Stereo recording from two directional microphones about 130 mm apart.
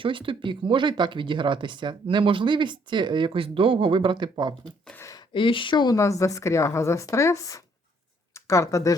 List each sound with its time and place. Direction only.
0.0 s speech: 40° right (ahead or behind)
4.9 s a sound: 25° left (ahead or behind)
5.3 s speech: 40° left (ahead or behind)
6.0 s a woman's voice: 25° left (ahead or behind)